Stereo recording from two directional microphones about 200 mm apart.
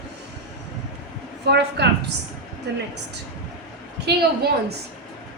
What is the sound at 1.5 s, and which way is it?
A woman's voice, 55° right (ahead or behind).